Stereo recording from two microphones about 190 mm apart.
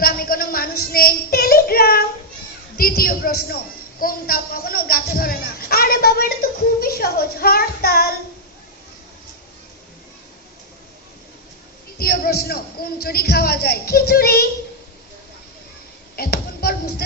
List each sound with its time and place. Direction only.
0.0 s child singing: 50° left (ahead or behind)
2.7 s speech: 50° left (ahead or behind)
4.0 s a sound: 50° left (ahead or behind)
6.7 s child singing: 50° left (ahead or behind)
11.9 s speech: 55° left (ahead or behind)
16.1 s a sound: 55° left (ahead or behind)